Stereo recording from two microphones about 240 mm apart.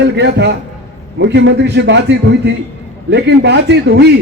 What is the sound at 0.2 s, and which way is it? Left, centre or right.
A man's voice, right.